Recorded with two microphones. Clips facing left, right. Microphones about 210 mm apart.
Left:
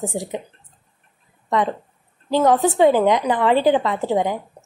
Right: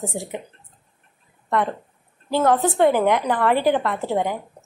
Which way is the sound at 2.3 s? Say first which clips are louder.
Left 2 dB; 15° left (ahead or behind).